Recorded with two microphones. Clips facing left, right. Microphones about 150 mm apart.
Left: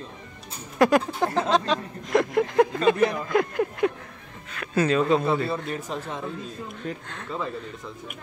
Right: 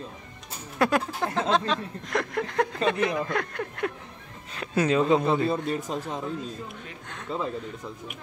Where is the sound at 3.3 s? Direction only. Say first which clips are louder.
Left 7 dB; 10° left (ahead or behind).